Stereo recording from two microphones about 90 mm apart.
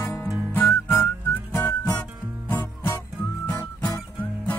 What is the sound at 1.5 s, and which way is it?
Music, 30° left (ahead or behind).